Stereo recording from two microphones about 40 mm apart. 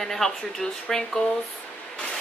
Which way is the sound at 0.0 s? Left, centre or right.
Centre.